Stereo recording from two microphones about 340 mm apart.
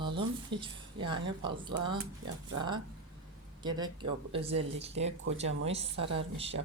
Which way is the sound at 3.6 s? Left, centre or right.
Centre.